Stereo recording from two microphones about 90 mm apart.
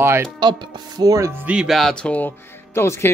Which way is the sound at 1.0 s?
40° right (ahead or behind).